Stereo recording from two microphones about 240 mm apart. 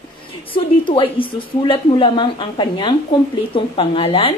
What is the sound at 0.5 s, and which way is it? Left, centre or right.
Speech, left.